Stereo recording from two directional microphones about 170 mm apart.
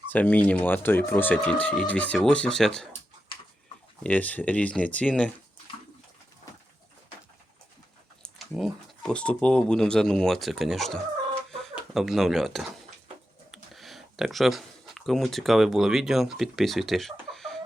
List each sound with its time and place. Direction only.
0.1 s speech: 10° left (ahead or behind)
3.3 s bird: 30° left (ahead or behind)
4.0 s speech: 10° left (ahead or behind)
8.2 s speech: centre (ahead or behind)